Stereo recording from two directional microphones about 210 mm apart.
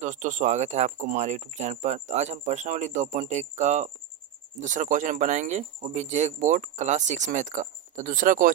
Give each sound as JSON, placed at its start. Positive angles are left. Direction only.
{"t": 0.0, "sound": "speech", "side_deg": -35}